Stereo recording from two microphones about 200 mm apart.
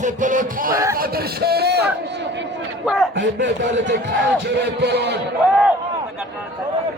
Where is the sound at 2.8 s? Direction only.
Centre (ahead or behind).